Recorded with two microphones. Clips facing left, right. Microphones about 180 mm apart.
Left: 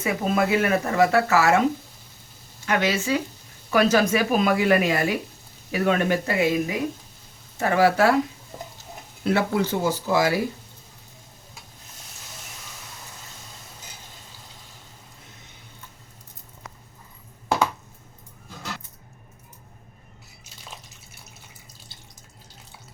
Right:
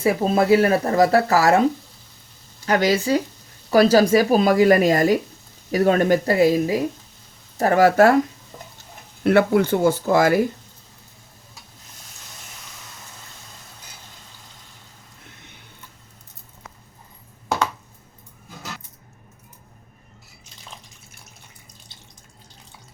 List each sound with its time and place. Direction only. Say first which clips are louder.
0.0 s speech: right 4 dB; 30° right (ahead or behind)
2.6 s speech: right 4 dB; 35° right (ahead or behind)
9.2 s speech: right 6 dB; 60° right (ahead or behind)